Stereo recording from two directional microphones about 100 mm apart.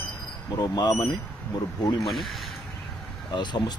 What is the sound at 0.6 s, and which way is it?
Speech, 45° left (ahead or behind).